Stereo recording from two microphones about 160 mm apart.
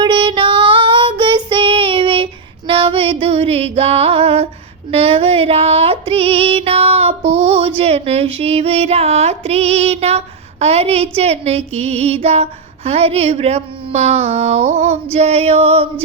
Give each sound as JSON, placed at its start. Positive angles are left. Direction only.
{"t": 0.0, "sound": "child singing", "side_deg": -30}
{"t": 4.9, "sound": "music", "side_deg": -40}